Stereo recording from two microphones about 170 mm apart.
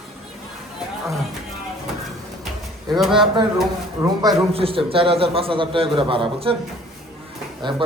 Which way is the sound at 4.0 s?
20° right (ahead or behind).